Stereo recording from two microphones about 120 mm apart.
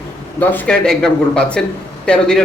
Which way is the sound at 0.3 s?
15° left (ahead or behind).